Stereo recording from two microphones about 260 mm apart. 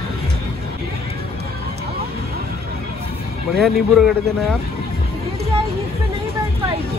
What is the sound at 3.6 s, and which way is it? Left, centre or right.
Speech, centre.